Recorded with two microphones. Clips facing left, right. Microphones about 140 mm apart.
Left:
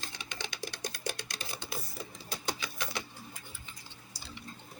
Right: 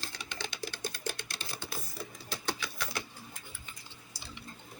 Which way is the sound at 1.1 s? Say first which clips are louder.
Even; 15° left (ahead or behind).